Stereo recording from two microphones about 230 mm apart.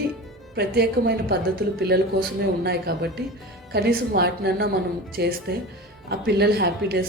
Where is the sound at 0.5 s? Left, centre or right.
Right.